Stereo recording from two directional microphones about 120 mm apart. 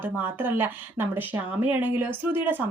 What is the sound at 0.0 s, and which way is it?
Speech, 15° right (ahead or behind).